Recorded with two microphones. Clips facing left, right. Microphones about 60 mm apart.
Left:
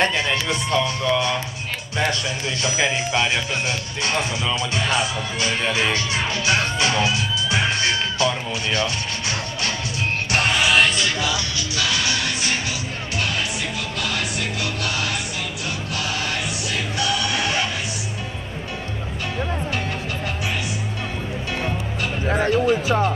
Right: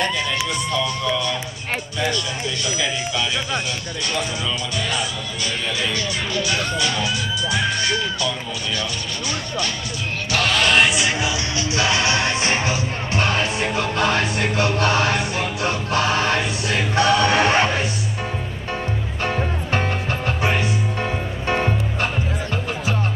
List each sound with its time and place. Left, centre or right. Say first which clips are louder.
0.0 s music: left 2 dB; left
2.6 s speech: left 4 dB; left
8.2 s music: left 3 dB; left
10.9 s music: right 1 dB; centre; by 17.6 s right
19.2 s music: right 2 dB; right
21.5 s music: right 7 dB; right